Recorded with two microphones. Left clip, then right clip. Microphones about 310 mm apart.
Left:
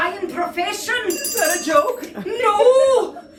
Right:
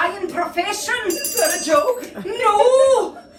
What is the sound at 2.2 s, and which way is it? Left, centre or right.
Speech, left.